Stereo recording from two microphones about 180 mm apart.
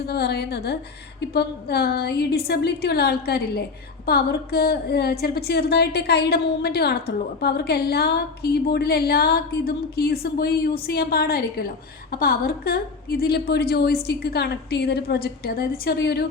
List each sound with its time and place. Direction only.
0.0 s a woman's voice: 60° left (ahead or behind)